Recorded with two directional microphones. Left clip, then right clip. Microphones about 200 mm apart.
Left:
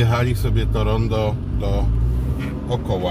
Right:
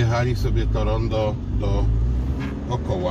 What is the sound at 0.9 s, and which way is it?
Speech, 25° left (ahead or behind).